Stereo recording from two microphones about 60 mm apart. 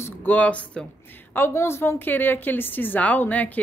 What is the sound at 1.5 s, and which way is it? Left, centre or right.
A woman's voice, left.